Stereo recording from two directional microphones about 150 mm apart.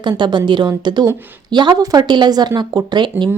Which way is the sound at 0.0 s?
30° right (ahead or behind).